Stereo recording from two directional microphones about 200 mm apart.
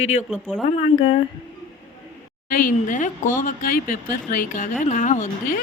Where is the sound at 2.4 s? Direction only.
45° left (ahead or behind).